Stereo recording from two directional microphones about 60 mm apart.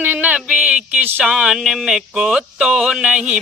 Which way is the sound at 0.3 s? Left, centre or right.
Centre.